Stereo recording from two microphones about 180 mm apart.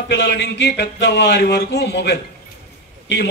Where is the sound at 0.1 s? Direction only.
70° left (ahead or behind).